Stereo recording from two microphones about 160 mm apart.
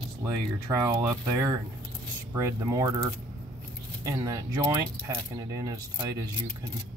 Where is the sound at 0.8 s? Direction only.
20° right (ahead or behind).